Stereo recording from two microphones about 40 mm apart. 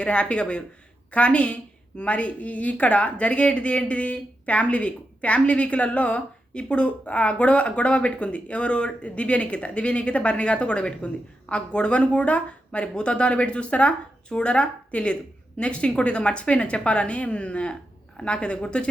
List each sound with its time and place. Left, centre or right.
0.0 s a woman's voice: left